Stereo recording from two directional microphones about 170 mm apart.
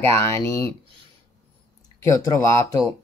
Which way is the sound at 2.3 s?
20° left (ahead or behind).